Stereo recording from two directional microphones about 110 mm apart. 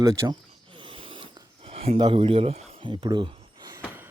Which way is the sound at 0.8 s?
50° right (ahead or behind).